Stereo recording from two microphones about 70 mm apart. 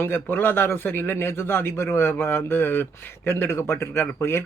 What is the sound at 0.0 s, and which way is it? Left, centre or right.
Speech, left.